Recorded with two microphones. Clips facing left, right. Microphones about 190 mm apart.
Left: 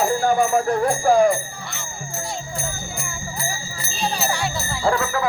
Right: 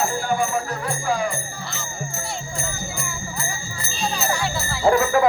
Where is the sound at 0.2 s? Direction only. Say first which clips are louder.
Left 5 dB; 45° left (ahead or behind).